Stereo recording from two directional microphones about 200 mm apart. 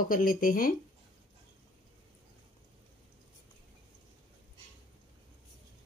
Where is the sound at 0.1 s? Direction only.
45° left (ahead or behind).